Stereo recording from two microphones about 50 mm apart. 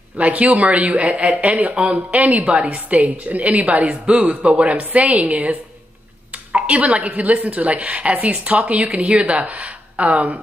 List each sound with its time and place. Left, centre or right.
0.2 s a woman's voice: right
6.5 s a woman's voice: right